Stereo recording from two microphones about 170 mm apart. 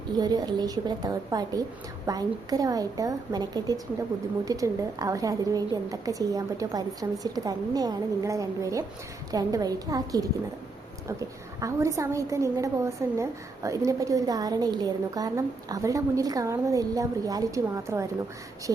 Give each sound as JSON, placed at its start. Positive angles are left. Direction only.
{"t": 0.2, "sound": "a woman's voice", "side_deg": -25}